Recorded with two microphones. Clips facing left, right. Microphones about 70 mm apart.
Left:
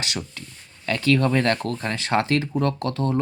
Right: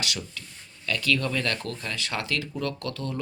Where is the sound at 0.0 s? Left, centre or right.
Left.